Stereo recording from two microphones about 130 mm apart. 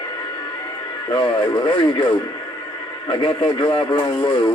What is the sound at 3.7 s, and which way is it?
Speech, 35° left (ahead or behind).